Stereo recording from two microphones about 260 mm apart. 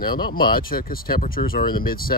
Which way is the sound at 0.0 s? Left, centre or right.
Left.